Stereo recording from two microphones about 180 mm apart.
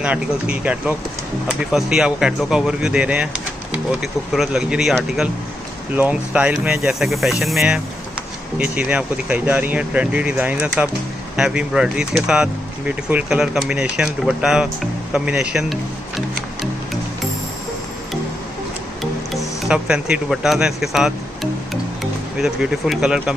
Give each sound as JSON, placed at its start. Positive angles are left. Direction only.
{"t": 0.0, "sound": "speech", "side_deg": -5}
{"t": 19.3, "sound": "speech", "side_deg": -5}